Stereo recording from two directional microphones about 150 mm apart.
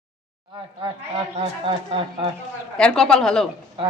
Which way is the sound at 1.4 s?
35° right (ahead or behind).